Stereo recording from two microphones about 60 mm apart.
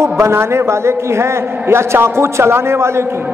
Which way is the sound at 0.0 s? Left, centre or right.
Right.